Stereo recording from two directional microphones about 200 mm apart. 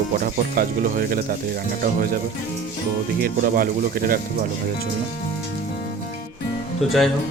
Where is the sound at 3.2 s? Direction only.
45° right (ahead or behind).